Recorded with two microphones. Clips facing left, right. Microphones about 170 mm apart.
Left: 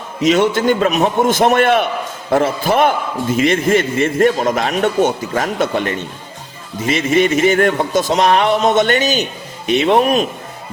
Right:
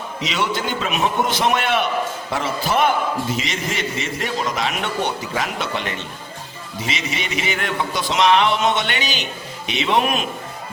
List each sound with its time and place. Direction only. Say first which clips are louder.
0.2 s speech: left 11 dB; 50° left (ahead or behind)